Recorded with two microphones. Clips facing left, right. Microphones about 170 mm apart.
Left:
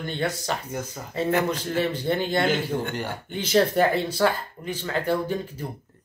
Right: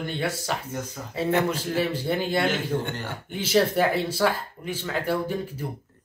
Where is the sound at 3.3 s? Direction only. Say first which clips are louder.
Even; 5° right (ahead or behind).